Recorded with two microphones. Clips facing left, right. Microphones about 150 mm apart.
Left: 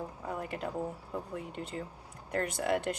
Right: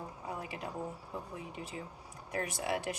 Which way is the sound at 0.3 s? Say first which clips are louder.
Left 4 dB; 55° left (ahead or behind).